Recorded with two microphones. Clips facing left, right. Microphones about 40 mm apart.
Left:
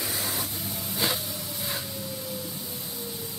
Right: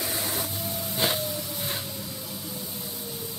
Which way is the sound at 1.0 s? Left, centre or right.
Right.